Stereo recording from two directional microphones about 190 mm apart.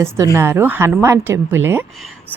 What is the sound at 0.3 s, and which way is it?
A woman's voice, 10° right (ahead or behind).